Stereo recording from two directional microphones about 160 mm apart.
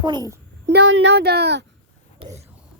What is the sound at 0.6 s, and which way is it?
A child's voice, 90° right.